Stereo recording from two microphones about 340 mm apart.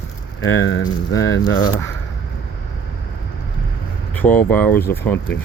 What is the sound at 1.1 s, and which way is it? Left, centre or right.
Speech, centre.